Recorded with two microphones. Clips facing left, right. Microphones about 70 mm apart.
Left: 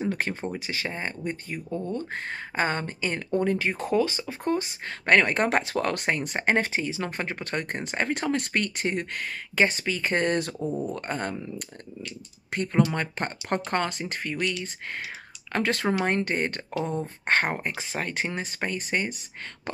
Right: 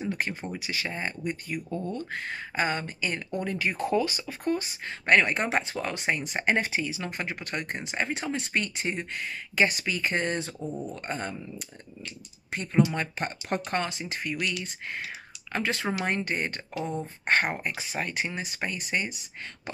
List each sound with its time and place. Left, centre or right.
0.1 s speech: left
0.7 s speech: left
4.8 s speech: left
9.7 s speech: left
10.6 s speech: left
10.9 s speech: left
12.9 s speech: left
15.5 s speech: left